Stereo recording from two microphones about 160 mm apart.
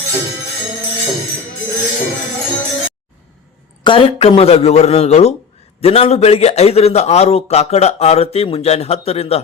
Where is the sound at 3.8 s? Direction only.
30° left (ahead or behind).